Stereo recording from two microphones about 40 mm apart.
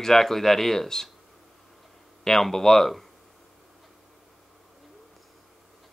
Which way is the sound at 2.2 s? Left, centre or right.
Centre.